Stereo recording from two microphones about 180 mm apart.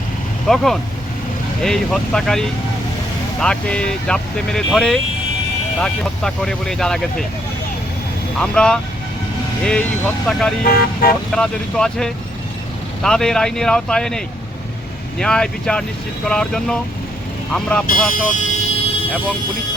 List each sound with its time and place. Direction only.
0.4 s speech: centre (ahead or behind)
8.4 s speech: 5° left (ahead or behind)
10.3 s speech: 5° left (ahead or behind)
10.6 s speech: 55° left (ahead or behind)
11.3 s speech: 5° left (ahead or behind)
15.2 s speech: 5° left (ahead or behind)
18.1 s vehicle: 45° left (ahead or behind)